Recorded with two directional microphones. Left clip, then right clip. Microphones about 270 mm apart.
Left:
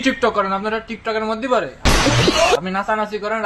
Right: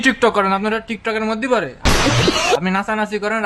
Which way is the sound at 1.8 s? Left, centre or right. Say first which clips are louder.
Left 1 dB; centre.